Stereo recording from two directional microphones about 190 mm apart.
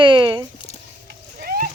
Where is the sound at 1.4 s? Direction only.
50° right (ahead or behind).